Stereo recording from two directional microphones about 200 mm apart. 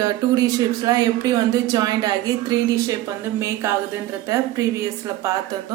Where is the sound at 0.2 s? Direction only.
20° right (ahead or behind).